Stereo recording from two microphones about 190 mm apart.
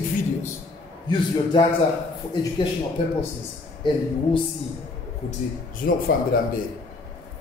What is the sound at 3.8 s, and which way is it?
Speech, 25° left (ahead or behind).